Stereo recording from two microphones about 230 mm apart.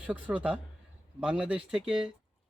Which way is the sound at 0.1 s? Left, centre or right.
Centre.